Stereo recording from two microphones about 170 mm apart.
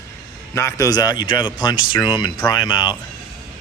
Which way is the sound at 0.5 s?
15° left (ahead or behind).